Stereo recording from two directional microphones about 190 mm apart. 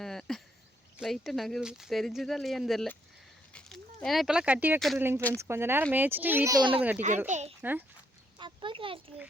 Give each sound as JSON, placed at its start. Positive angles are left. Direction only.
{"t": 0.0, "sound": "a sound", "side_deg": 0}
{"t": 0.9, "sound": "speech", "side_deg": 0}
{"t": 5.4, "sound": "a child's voice", "side_deg": -15}
{"t": 7.3, "sound": "a child's voice", "side_deg": -40}
{"t": 7.6, "sound": "a child's voice", "side_deg": -10}
{"t": 8.4, "sound": "a sound", "side_deg": -25}